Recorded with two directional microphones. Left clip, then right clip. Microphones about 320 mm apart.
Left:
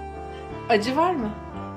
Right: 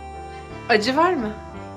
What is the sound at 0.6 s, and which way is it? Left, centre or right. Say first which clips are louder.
Speech: right 3 dB; centre.